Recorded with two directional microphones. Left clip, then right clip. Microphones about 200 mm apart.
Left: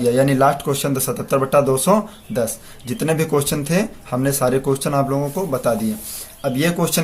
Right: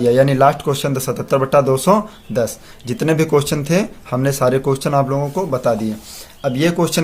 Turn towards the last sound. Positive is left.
turn(degrees=-20)  # may be behind; listen again after turning